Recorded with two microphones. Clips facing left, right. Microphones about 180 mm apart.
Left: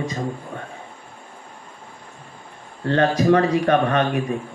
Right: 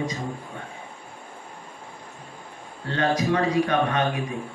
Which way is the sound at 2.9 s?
55° left (ahead or behind).